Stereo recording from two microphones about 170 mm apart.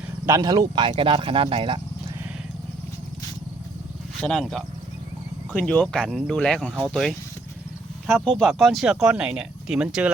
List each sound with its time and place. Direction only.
0.3 s speech: 20° right (ahead or behind)
4.2 s speech: centre (ahead or behind)